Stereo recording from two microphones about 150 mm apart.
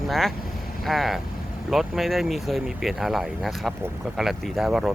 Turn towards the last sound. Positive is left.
turn(degrees=-5)  # may be behind; listen again after turning